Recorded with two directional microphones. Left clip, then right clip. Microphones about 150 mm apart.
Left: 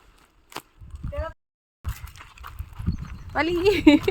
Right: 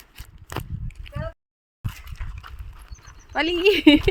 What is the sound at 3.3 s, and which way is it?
Speech, 10° right (ahead or behind).